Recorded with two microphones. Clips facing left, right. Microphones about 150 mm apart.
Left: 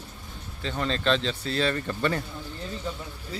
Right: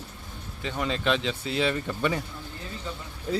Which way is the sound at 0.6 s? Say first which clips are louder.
Left 1 dB; 10° right (ahead or behind).